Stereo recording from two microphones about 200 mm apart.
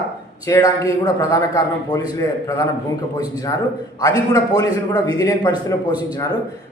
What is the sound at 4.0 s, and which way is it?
A man's voice, 15° left (ahead or behind).